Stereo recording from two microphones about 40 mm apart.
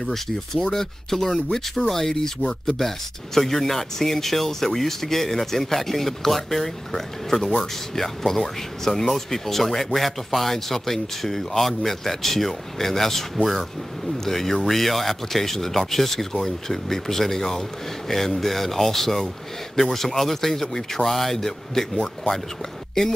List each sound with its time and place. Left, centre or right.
0.1 s speech: centre
3.3 s speech: centre
21.9 s speech: left